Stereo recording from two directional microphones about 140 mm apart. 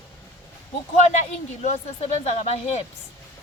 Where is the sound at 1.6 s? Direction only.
50° left (ahead or behind).